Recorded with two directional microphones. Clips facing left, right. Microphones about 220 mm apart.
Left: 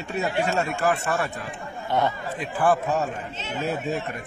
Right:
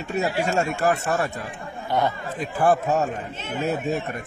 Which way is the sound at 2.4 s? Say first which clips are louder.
Right 2 dB; 40° right (ahead or behind).